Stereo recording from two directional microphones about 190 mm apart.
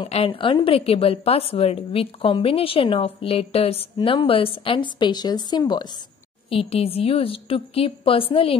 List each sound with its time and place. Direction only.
0.0 s a woman's voice: 30° left (ahead or behind)